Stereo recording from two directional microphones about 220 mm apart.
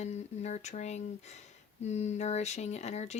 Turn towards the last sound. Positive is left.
turn(degrees=30)  # may be behind; listen again after turning